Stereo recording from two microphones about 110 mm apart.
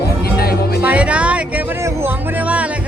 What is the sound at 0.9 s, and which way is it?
Music, 10° right (ahead or behind).